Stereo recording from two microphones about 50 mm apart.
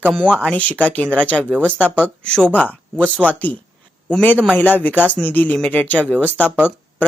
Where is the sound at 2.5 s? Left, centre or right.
Left.